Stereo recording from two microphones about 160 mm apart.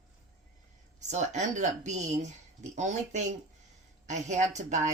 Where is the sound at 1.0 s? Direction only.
45° right (ahead or behind).